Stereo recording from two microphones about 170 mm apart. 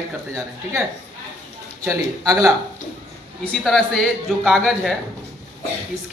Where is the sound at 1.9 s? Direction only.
15° right (ahead or behind).